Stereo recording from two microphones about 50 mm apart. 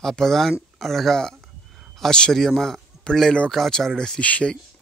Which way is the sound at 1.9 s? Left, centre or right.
Centre.